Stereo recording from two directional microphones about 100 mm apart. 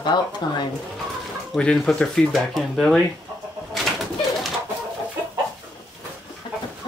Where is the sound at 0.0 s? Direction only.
50° left (ahead or behind).